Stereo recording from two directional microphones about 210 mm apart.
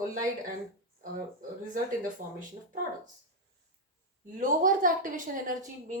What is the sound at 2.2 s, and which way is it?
Speech, 40° right (ahead or behind).